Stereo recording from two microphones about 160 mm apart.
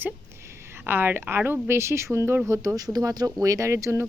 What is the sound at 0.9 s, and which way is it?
Speech, 15° right (ahead or behind).